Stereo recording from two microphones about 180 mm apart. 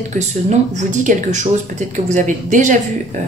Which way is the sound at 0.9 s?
45° right (ahead or behind).